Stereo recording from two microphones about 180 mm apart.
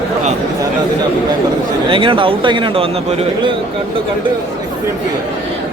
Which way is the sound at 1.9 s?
30° right (ahead or behind).